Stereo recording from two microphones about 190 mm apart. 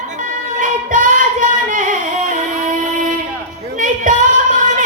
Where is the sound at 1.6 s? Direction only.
45° right (ahead or behind).